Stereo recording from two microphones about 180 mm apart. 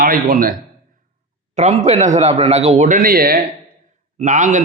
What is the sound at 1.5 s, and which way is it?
A man's voice, 40° right (ahead or behind).